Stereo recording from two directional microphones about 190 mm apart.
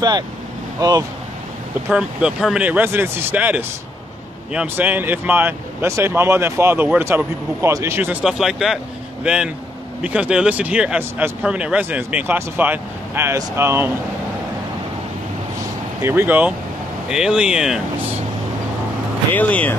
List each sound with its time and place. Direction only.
0.7 s speech: 20° right (ahead or behind)
1.9 s speech: 5° right (ahead or behind)
16.0 s speech: 10° right (ahead or behind)
19.3 s speech: 10° left (ahead or behind)